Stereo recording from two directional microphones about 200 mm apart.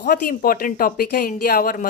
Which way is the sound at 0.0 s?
45° left (ahead or behind).